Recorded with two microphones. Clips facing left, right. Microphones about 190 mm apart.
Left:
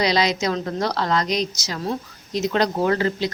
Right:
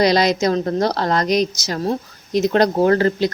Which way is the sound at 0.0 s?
45° right (ahead or behind).